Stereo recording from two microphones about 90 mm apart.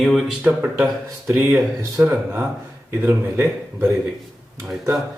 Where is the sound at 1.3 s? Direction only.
30° right (ahead or behind).